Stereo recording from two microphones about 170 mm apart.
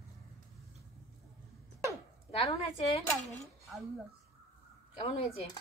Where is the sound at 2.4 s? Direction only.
35° left (ahead or behind).